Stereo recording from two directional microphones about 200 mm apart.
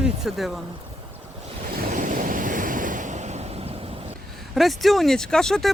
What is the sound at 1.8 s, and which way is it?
Waves, 40° right (ahead or behind).